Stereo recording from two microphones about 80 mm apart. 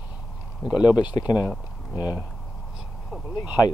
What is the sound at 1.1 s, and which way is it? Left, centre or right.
Speech, left.